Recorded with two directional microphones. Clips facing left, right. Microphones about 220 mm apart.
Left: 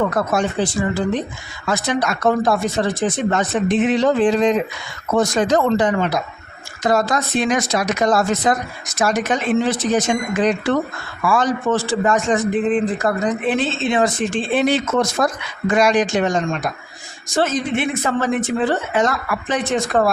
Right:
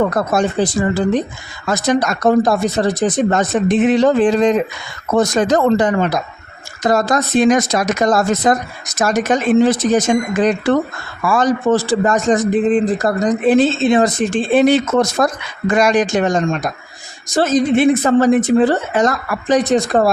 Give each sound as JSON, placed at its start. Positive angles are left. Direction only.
{"t": 0.1, "sound": "speech", "side_deg": -40}